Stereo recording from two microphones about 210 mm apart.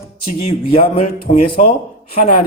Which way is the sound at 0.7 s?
25° left (ahead or behind).